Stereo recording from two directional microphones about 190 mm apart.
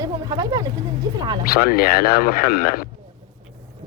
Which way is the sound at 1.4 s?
50° left (ahead or behind).